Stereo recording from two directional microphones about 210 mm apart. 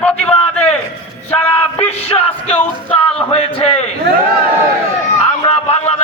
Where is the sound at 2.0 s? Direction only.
30° left (ahead or behind).